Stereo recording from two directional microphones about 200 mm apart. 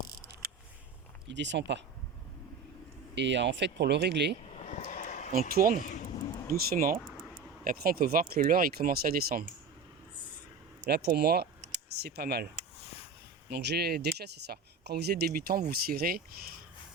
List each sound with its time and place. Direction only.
1.3 s speech: 60° right (ahead or behind)
3.2 s speech: 60° right (ahead or behind)
4.7 s a sound: 40° left (ahead or behind)
5.3 s speech: 50° right (ahead or behind)
10.8 s speech: 55° right (ahead or behind)
13.5 s speech: 55° right (ahead or behind)